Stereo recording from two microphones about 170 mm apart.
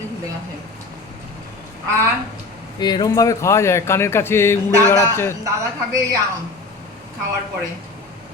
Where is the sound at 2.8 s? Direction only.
25° left (ahead or behind).